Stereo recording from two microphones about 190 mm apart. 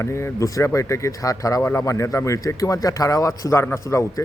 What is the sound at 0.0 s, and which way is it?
Speech, 15° left (ahead or behind).